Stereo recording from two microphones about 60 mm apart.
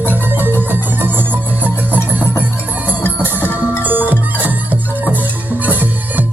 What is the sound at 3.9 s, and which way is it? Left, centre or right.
Music, right.